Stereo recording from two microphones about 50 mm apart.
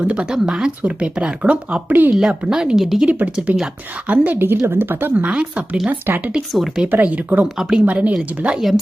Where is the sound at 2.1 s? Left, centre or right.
Centre.